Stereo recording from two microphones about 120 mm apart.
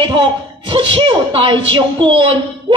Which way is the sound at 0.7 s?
45° right (ahead or behind).